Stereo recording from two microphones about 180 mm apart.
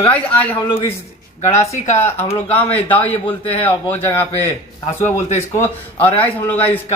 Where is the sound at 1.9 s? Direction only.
15° left (ahead or behind).